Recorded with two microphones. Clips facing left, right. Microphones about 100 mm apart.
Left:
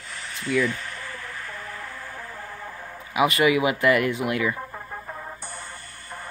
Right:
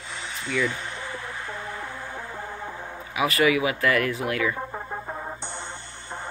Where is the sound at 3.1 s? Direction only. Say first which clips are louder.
Left 2 dB; 20° left (ahead or behind).